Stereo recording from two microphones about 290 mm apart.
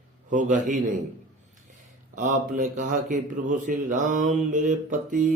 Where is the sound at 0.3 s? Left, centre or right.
Right.